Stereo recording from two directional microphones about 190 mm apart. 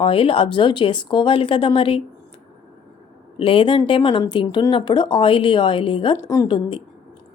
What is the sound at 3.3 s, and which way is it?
A woman's voice, 30° left (ahead or behind).